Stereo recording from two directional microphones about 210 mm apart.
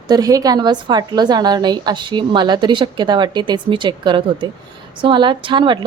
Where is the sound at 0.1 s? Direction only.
15° right (ahead or behind).